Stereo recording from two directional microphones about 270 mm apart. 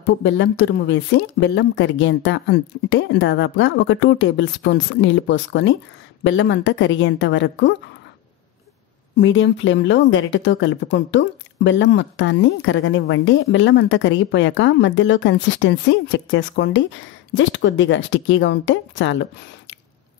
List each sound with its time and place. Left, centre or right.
0.0 s speech: left
9.1 s speech: left